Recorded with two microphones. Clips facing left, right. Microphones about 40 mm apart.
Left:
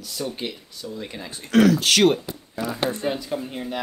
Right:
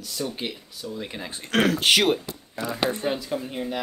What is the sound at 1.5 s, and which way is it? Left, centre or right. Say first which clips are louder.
Speech: left 5 dB; right.